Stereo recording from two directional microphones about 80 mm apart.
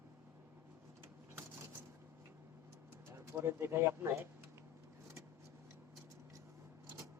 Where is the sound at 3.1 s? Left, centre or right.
Right.